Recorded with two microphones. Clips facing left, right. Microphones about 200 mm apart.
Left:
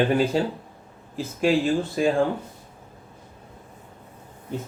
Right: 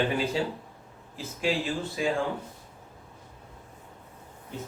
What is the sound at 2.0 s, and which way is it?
Speech, 50° left (ahead or behind).